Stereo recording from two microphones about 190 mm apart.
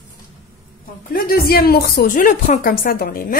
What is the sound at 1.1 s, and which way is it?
A woman's voice, 50° left (ahead or behind).